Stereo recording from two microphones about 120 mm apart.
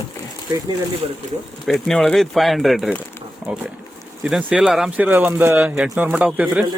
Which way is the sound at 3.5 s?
10° right (ahead or behind).